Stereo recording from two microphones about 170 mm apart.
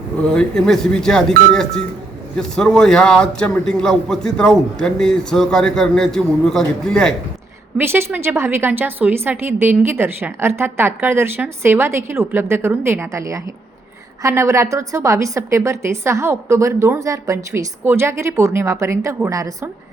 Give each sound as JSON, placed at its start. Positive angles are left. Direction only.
{"t": 0.3, "sound": "a man's voice", "side_deg": 5}
{"t": 2.4, "sound": "a man's voice", "side_deg": 5}
{"t": 7.8, "sound": "a woman's voice", "side_deg": -15}